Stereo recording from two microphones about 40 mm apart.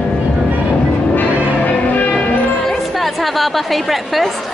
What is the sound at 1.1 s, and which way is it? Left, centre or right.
Music, left.